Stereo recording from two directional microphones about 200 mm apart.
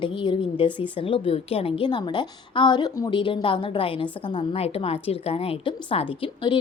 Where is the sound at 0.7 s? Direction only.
10° right (ahead or behind).